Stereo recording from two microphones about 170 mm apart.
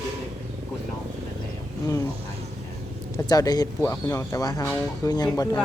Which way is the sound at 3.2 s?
25° left (ahead or behind).